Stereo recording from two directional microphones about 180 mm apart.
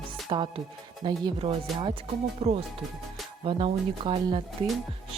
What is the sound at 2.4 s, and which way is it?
Music, 35° right (ahead or behind).